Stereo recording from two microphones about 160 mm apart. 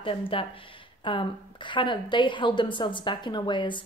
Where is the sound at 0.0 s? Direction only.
35° left (ahead or behind).